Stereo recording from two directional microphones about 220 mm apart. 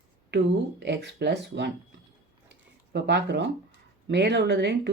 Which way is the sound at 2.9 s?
50° right (ahead or behind).